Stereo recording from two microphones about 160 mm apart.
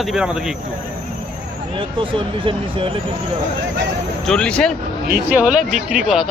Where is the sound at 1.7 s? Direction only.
30° right (ahead or behind).